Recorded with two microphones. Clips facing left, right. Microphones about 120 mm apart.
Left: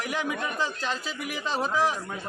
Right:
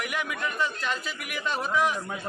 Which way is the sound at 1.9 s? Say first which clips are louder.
Right 1 dB; 10° right (ahead or behind).